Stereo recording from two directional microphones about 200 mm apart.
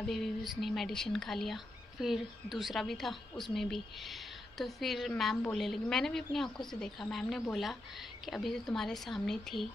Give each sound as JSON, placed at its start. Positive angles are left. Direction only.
{"t": 0.0, "sound": "speech", "side_deg": 0}